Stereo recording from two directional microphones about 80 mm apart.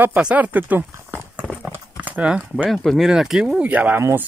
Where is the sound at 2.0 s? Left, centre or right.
Centre.